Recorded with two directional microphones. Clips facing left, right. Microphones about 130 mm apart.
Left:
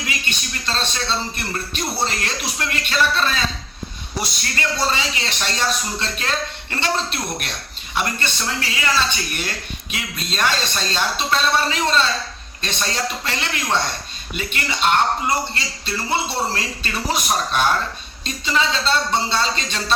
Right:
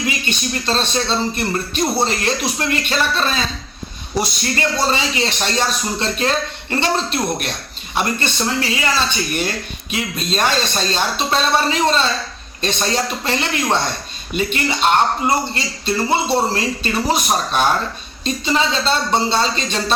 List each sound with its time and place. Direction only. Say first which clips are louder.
0.0 s a man's voice: right 6 dB; 25° right (ahead or behind)
4.5 s a man's voice: right 3 dB; 25° right (ahead or behind)